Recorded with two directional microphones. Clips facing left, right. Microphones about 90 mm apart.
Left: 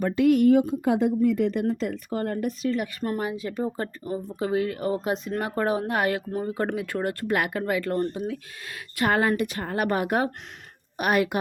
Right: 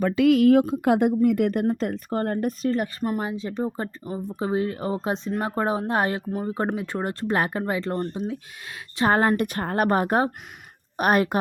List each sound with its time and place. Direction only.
0.3 s a woman's voice: 90° right
0.6 s speech: 60° right (ahead or behind); by 2.9 s 40° right (ahead or behind)
3.2 s speech: 25° right (ahead or behind)
9.0 s a woman's voice: 35° right (ahead or behind)
9.4 s a woman's voice: 50° right (ahead or behind)